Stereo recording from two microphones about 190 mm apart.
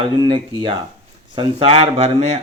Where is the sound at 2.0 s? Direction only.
35° right (ahead or behind).